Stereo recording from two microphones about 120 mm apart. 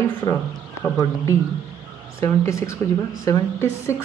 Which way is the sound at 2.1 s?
25° left (ahead or behind).